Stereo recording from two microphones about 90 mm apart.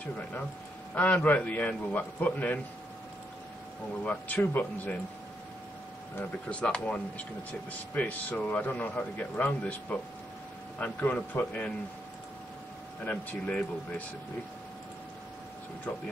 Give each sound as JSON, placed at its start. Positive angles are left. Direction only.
{"t": 0.9, "sound": "speech", "side_deg": 15}
{"t": 4.0, "sound": "speech", "side_deg": 15}
{"t": 6.5, "sound": "speech", "side_deg": 15}
{"t": 13.0, "sound": "speech", "side_deg": 20}